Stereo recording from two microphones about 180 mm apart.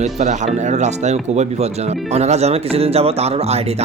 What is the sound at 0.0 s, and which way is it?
Speech, 40° right (ahead or behind).